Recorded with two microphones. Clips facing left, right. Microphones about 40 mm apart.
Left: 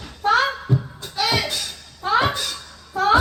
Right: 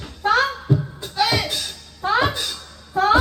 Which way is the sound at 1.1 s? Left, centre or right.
Centre.